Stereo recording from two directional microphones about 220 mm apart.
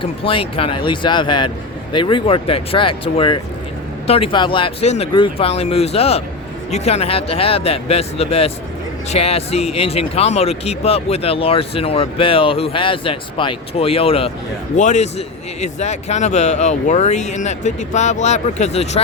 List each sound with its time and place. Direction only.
0.0 s speech: 25° left (ahead or behind)